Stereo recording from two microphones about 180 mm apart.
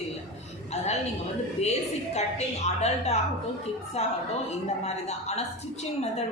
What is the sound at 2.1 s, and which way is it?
A woman's voice, 40° left (ahead or behind).